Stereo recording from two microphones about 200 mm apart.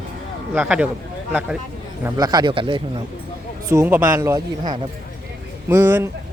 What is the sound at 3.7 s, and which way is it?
A man's voice, 10° right (ahead or behind).